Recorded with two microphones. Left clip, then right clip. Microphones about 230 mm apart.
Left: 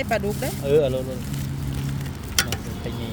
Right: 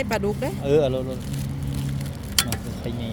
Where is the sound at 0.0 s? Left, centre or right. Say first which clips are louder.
Even; right.